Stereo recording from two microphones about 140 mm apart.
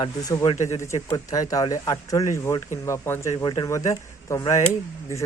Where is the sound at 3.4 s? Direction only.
30° left (ahead or behind).